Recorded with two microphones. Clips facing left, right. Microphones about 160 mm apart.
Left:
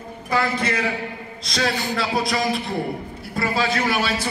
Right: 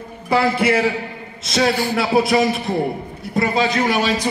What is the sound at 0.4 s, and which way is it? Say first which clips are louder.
Speech: right 6 dB; 10° right (ahead or behind).